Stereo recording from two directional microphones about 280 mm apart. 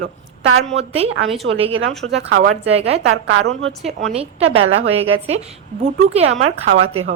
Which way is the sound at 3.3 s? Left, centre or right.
Right.